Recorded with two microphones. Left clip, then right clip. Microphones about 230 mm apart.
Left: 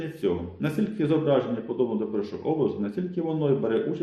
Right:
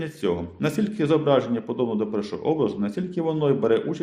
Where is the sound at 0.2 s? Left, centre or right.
Right.